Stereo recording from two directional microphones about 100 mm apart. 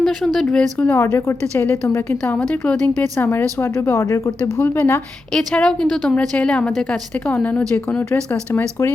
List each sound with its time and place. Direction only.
0.0 s a sound: centre (ahead or behind)
0.3 s a woman's voice: 5° left (ahead or behind)
0.9 s speech: 25° left (ahead or behind)
2.4 s a woman's voice: 5° left (ahead or behind)
5.3 s a woman's voice: 10° left (ahead or behind)